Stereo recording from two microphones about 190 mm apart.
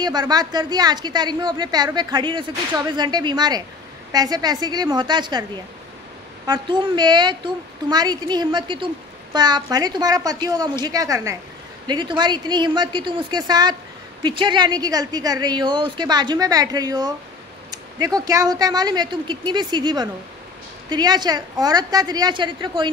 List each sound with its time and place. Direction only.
0.0 s a woman's voice: 20° right (ahead or behind)
6.4 s a woman's voice: 25° right (ahead or behind)